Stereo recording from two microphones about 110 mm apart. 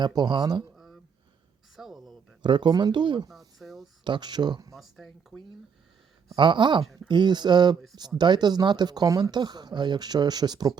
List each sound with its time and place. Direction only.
0.0 s speech: 40° right (ahead or behind)
1.7 s a sound: centre (ahead or behind)
2.4 s speech: 45° right (ahead or behind)
3.2 s a sound: centre (ahead or behind)
4.0 s speech: 45° right (ahead or behind)
4.7 s speech: centre (ahead or behind)
6.3 s speech: 45° right (ahead or behind)